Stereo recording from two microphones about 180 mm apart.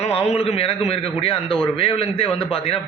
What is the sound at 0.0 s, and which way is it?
A man's voice, 35° left (ahead or behind).